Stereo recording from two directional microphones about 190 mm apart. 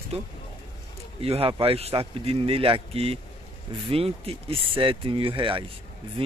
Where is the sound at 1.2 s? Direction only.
30° right (ahead or behind).